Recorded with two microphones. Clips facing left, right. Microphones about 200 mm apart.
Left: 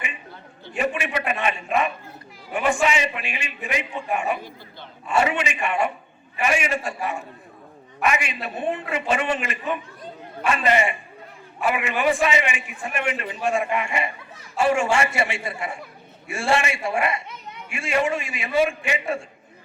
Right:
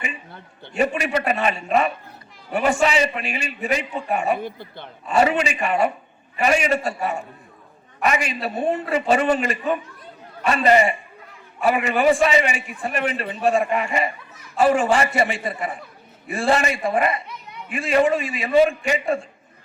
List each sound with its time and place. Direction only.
0.8 s a man's voice: 40° right (ahead or behind)